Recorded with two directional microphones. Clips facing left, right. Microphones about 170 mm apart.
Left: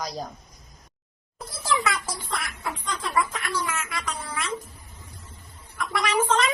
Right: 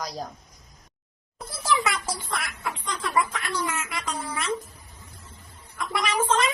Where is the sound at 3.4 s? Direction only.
25° right (ahead or behind).